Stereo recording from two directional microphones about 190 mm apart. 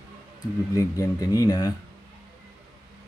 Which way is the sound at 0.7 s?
15° left (ahead or behind).